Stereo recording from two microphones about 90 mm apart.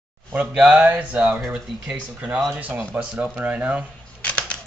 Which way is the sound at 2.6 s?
20° right (ahead or behind).